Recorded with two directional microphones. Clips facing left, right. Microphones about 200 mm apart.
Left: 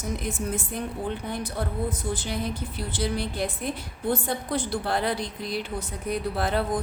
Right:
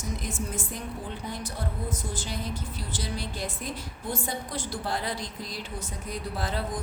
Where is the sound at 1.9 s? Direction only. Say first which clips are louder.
Left 4 dB; 60° left (ahead or behind).